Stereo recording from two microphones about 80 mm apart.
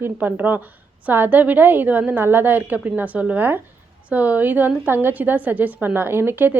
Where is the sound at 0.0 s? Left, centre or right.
Right.